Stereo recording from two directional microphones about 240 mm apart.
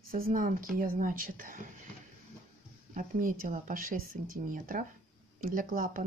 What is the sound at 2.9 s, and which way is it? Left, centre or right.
Speech, right.